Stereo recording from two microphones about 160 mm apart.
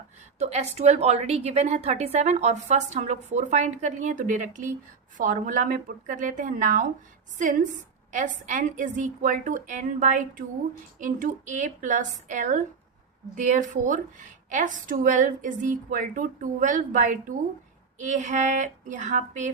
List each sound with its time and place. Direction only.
0.3 s a woman's voice: 45° right (ahead or behind)